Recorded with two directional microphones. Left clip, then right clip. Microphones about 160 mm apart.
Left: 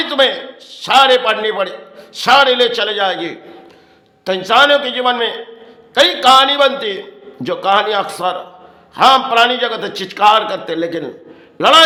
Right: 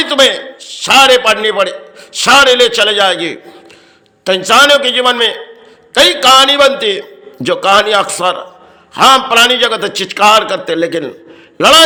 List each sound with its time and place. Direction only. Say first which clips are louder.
0.0 s a man's voice: right 4 dB; 20° right (ahead or behind)